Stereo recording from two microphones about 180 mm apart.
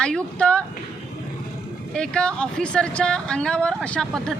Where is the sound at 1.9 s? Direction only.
5° left (ahead or behind).